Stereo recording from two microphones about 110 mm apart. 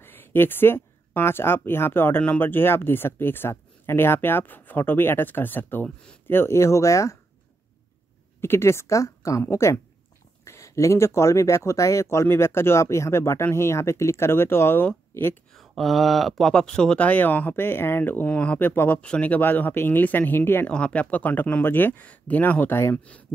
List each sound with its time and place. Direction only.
0.0 s speech: 20° left (ahead or behind)
8.4 s speech: 20° left (ahead or behind)
15.5 s speech: centre (ahead or behind); by 23.2 s 15° left (ahead or behind)